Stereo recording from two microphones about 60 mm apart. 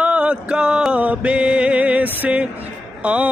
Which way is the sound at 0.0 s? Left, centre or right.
Centre.